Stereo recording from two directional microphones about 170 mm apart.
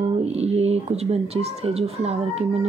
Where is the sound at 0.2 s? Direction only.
40° right (ahead or behind).